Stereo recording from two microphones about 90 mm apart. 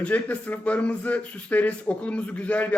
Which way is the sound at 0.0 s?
15° left (ahead or behind).